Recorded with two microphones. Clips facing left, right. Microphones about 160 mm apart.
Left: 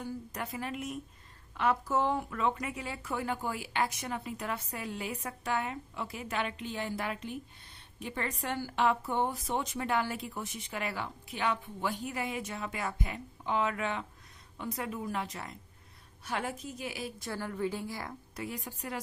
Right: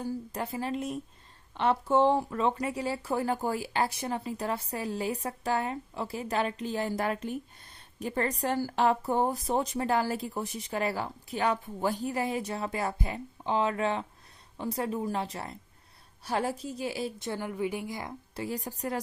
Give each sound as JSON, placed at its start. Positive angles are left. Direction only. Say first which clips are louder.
{"t": 0.0, "sound": "a woman's voice", "louder": "right 5 dB", "side_deg": -30}
{"t": 18.4, "sound": "a woman's voice", "louder": "right 6 dB", "side_deg": -35}